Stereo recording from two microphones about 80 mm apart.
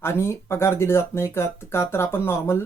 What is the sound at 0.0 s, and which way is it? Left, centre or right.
Speech, left.